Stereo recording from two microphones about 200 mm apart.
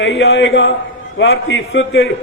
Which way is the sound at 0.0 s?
65° left (ahead or behind).